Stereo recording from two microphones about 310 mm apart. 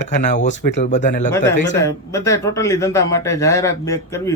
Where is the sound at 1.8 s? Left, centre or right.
Centre.